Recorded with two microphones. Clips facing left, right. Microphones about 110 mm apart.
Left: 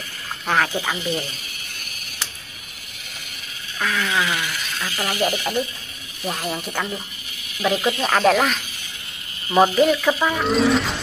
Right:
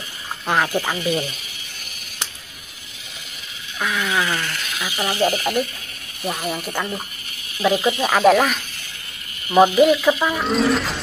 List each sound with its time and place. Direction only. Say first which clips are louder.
0.5 s speech: right 1 dB; 10° right (ahead or behind)
3.8 s speech: right 1 dB; 10° right (ahead or behind)
4.3 s speech: right 1 dB; 5° left (ahead or behind)
4.8 s speech: right 2 dB; 15° right (ahead or behind)
5.1 s speech: right 3 dB; 30° right (ahead or behind)
6.2 s speech: right 1 dB; centre (ahead or behind)
7.7 s speech: right 1 dB; 20° right (ahead or behind)
8.0 s speech: right 3 dB; 5° right (ahead or behind)
10.2 s speech: even; centre (ahead or behind)